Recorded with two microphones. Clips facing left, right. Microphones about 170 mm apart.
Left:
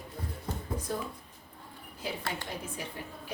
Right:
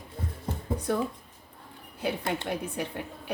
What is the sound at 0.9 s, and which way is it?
Speech, 70° right (ahead or behind).